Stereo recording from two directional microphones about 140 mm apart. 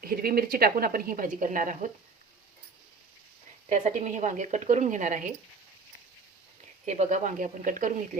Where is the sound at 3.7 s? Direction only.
60° right (ahead or behind).